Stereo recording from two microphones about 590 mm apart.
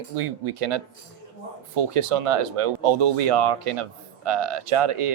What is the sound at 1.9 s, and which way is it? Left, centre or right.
Speech, right.